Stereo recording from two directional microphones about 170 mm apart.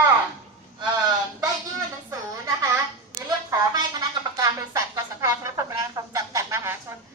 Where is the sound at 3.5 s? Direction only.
25° right (ahead or behind).